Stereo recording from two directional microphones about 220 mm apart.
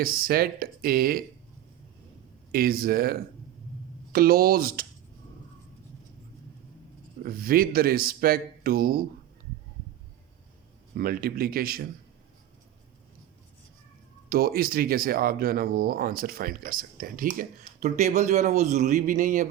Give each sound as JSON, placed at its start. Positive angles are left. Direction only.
{"t": 0.0, "sound": "speech", "side_deg": -40}
{"t": 2.5, "sound": "speech", "side_deg": -40}
{"t": 7.2, "sound": "speech", "side_deg": -40}
{"t": 10.9, "sound": "speech", "side_deg": -40}
{"t": 14.3, "sound": "speech", "side_deg": -45}